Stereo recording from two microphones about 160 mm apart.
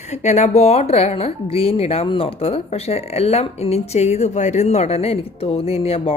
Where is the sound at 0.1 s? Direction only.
45° left (ahead or behind).